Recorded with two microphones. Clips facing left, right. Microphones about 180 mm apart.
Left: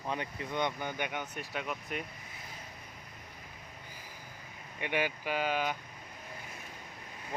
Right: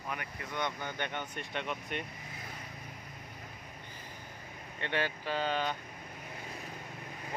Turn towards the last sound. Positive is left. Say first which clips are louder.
# left 1 dB
turn(degrees=10)  # may be behind; listen again after turning